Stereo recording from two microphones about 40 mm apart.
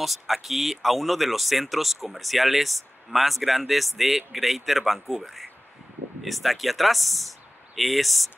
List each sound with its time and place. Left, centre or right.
0.0 s speech: centre